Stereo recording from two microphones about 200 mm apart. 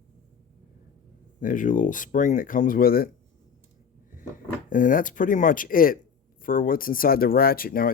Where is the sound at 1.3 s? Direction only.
40° left (ahead or behind).